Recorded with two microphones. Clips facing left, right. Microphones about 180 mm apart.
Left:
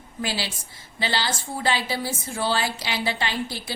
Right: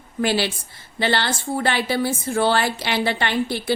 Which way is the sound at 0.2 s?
60° right (ahead or behind).